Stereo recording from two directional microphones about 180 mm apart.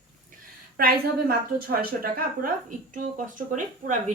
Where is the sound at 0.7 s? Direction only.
55° right (ahead or behind).